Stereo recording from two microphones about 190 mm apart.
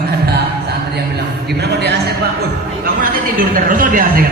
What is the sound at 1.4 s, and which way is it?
Speech, 60° right (ahead or behind).